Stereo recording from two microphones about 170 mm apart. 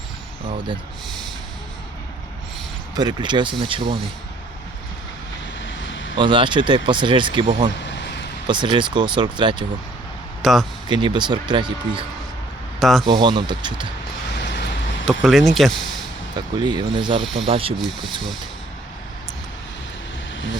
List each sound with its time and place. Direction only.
1.0 s snort: centre (ahead or behind)
2.9 s speech: 25° right (ahead or behind)
5.6 s vehicle: 90° left
6.1 s speech: 30° right (ahead or behind)
8.4 s speech: 25° right (ahead or behind)
10.4 s speech: centre (ahead or behind)
10.8 s speech: 25° right (ahead or behind)
12.8 s speech: centre (ahead or behind)
13.1 s speech: 25° right (ahead or behind)
15.0 s speech: centre (ahead or behind)
16.3 s speech: 25° right (ahead or behind)
17.7 s speech: centre (ahead or behind)